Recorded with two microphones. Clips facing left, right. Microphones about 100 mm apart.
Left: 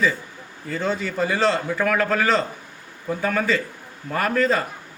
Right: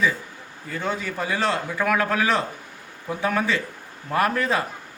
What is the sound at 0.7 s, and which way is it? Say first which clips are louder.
A man's voice: left 3 dB; 10° right (ahead or behind).